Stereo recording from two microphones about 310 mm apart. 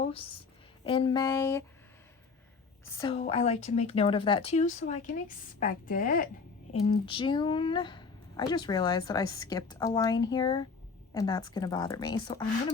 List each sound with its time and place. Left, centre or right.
0.0 s speech: centre
3.0 s speech: centre